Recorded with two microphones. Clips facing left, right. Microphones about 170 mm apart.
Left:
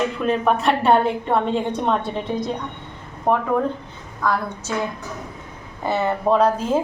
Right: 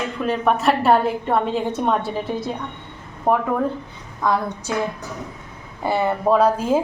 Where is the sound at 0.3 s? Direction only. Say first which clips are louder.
Right 1 dB; centre (ahead or behind).